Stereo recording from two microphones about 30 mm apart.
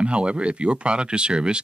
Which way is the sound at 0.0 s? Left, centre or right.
Right.